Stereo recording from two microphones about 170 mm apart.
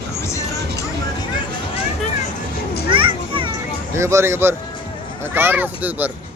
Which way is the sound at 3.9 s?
15° right (ahead or behind).